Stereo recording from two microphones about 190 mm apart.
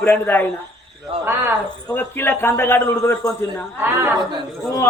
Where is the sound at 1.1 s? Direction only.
30° right (ahead or behind).